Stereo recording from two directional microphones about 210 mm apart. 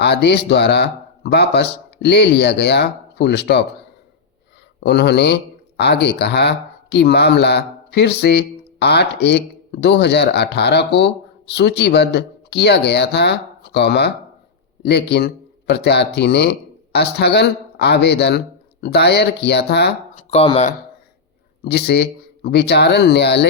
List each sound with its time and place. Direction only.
0.0 s speech: 55° left (ahead or behind)
4.8 s speech: 50° left (ahead or behind)
20.1 s speech: 30° left (ahead or behind)
21.6 s speech: 50° left (ahead or behind)